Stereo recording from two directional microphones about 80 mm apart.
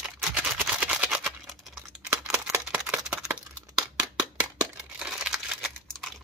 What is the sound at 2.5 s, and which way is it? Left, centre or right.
Single-lens reflex camera, centre.